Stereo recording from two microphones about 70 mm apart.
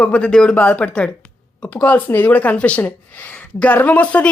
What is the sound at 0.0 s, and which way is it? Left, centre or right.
Speech, centre.